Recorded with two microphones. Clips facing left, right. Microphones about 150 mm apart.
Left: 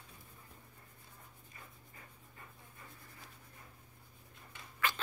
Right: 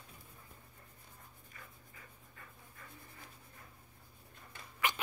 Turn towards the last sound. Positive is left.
turn(degrees=-15)  # may be behind; listen again after turning